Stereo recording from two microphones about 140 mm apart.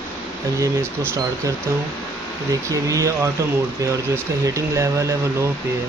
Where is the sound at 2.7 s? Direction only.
25° right (ahead or behind).